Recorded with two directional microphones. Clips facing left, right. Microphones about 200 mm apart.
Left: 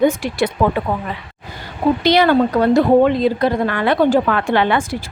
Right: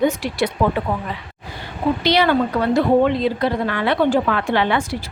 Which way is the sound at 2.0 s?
45° left (ahead or behind).